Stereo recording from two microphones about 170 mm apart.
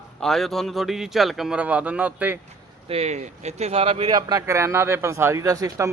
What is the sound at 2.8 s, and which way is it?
Speech, 35° right (ahead or behind).